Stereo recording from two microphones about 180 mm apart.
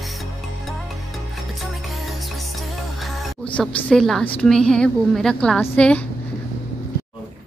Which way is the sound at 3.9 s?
5° left (ahead or behind).